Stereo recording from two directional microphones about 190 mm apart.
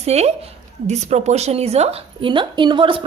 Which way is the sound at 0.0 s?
35° right (ahead or behind).